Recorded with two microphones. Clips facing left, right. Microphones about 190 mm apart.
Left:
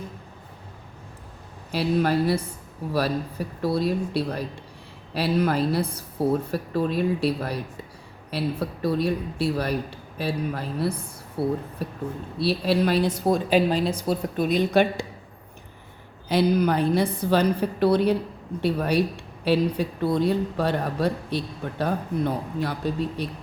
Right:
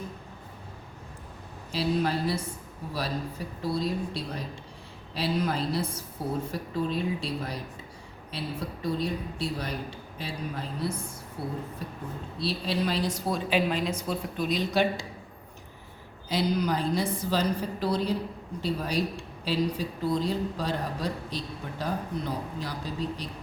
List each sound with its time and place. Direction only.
1.7 s speech: 60° left (ahead or behind)
13.7 s speech: 35° left (ahead or behind)
14.3 s speech: 55° left (ahead or behind)
16.3 s speech: 55° left (ahead or behind)